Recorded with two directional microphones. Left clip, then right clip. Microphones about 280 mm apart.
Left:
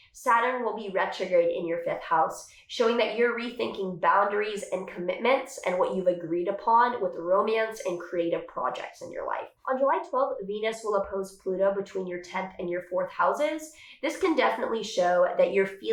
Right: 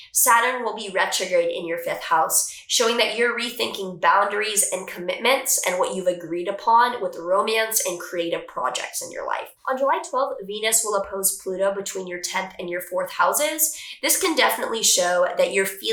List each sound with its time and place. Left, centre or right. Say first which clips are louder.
0.1 s speech: right 6 dB; centre
8.6 s speech: right 6 dB; centre
9.1 s speech: right 4 dB; centre